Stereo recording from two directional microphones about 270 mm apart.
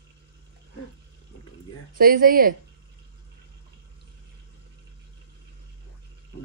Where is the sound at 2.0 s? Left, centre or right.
Right.